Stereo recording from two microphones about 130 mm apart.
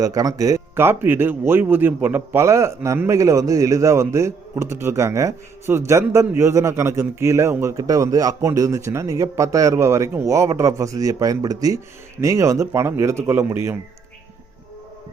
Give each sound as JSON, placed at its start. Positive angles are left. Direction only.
{"t": 0.0, "sound": "speech", "side_deg": -25}